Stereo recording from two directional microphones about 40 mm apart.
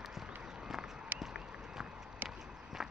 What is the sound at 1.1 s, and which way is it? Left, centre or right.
Run, right.